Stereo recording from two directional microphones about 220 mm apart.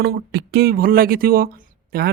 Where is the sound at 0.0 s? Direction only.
50° right (ahead or behind).